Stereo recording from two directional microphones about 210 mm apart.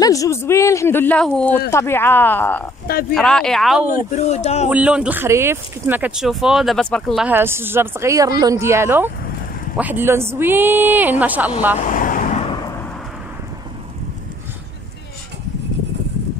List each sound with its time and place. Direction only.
0.0 s a man's voice: 15° left (ahead or behind)
2.9 s speech: 45° left (ahead or behind)
3.2 s speech: 5° left (ahead or behind)
3.9 s speech: 35° left (ahead or behind)
4.6 s speech: 5° right (ahead or behind)
11.8 s vehicle: 40° left (ahead or behind)